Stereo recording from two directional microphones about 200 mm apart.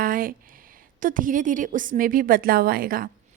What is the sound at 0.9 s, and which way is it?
A woman's voice, 40° right (ahead or behind).